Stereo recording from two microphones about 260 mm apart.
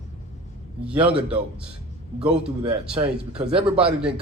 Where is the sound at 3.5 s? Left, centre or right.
Right.